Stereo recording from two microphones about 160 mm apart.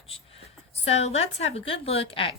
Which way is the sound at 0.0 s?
35° left (ahead or behind).